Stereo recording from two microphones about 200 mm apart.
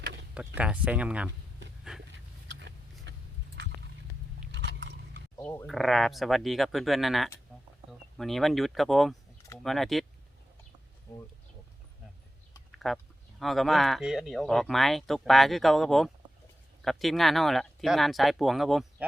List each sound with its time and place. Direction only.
0.0 s door: 60° right (ahead or behind)
0.3 s speech: 5° right (ahead or behind)
2.1 s vehicle: 60° right (ahead or behind)
4.5 s biting: 65° right (ahead or behind)
5.4 s speech: 10° left (ahead or behind)
5.6 s speech: centre (ahead or behind)
7.5 s a sound: 5° right (ahead or behind)
7.9 s speech: centre (ahead or behind)
12.8 s speech: centre (ahead or behind)